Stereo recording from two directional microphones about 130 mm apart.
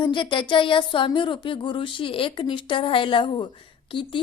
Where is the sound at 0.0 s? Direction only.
40° left (ahead or behind).